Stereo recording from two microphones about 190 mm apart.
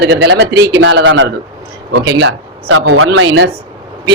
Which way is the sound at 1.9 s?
60° right (ahead or behind).